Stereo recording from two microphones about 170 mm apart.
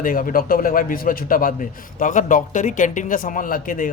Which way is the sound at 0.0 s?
55° left (ahead or behind).